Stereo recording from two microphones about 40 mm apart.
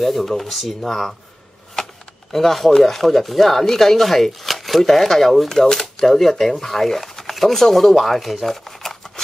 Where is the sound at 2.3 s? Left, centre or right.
Centre.